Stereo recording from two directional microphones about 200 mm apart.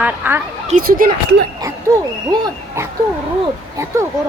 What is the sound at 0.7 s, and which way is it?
Speech, 45° right (ahead or behind).